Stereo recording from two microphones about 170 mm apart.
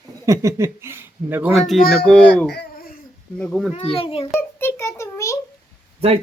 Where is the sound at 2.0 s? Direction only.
5° left (ahead or behind).